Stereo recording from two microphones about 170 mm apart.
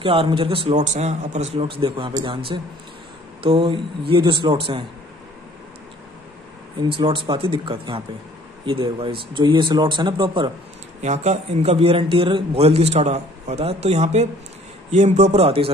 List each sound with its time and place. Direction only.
0.0 s a man's voice: 30° right (ahead or behind)
6.8 s speech: 30° right (ahead or behind)
11.0 s a man's voice: 40° right (ahead or behind)